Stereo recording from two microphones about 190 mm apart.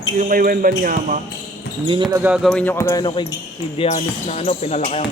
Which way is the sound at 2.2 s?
5° right (ahead or behind).